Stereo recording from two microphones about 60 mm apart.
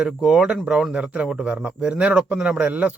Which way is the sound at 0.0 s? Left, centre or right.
Centre.